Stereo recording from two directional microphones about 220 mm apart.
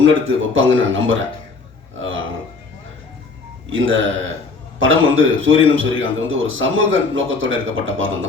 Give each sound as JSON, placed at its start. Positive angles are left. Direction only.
{"t": 0.0, "sound": "a man's voice", "side_deg": -60}
{"t": 3.7, "sound": "a man's voice", "side_deg": -60}